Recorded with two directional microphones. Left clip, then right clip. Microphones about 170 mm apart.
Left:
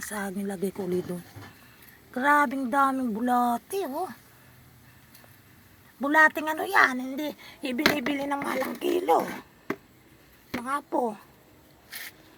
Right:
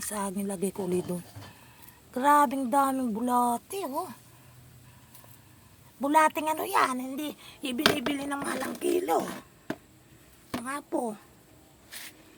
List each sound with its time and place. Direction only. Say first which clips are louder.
0.0 s speech: even; 20° right (ahead or behind)
3.2 s a woman's voice: left 1 dB; 10° right (ahead or behind)
6.0 s a woman's voice: left 3 dB; 15° right (ahead or behind)
10.6 s a woman's voice: left 5 dB; 20° right (ahead or behind)